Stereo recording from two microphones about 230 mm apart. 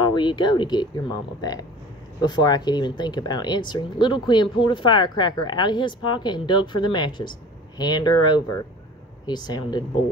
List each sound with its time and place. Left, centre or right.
0.0 s speech: centre